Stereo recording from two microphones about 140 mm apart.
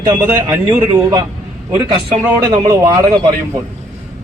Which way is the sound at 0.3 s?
15° right (ahead or behind).